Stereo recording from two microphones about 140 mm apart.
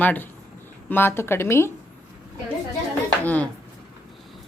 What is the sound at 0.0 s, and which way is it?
Speech, 10° left (ahead or behind).